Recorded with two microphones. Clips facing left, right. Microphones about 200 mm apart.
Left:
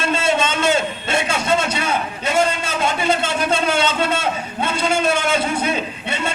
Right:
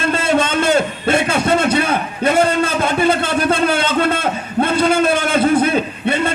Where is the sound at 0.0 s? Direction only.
55° right (ahead or behind).